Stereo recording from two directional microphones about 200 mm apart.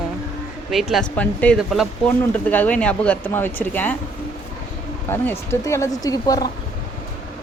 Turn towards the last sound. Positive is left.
turn(degrees=20)  # may be behind; listen again after turning